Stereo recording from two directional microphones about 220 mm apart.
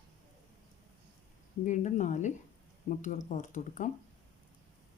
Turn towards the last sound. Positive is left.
turn(degrees=35)  # may be behind; listen again after turning